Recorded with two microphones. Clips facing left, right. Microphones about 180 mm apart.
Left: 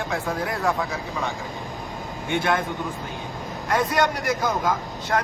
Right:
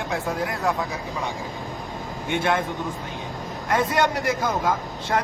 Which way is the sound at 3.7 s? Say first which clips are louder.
Even; 25° right (ahead or behind).